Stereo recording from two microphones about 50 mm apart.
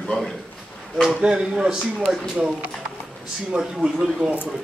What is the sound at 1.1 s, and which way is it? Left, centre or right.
A man's voice, centre.